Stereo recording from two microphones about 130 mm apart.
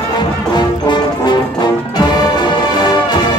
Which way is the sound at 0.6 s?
35° left (ahead or behind).